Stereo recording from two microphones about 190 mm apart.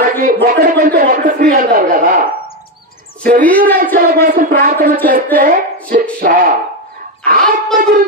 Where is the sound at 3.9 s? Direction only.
50° right (ahead or behind).